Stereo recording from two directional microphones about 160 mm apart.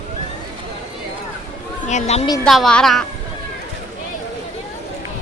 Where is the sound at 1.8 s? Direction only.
45° left (ahead or behind).